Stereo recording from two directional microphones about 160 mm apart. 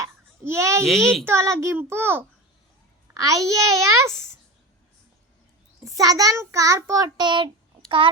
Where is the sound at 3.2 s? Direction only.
20° right (ahead or behind).